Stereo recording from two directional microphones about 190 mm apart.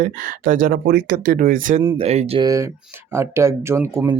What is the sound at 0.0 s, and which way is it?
Speech, 40° right (ahead or behind).